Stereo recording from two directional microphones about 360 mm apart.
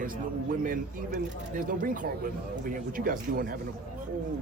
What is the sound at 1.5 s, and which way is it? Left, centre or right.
Speech, right.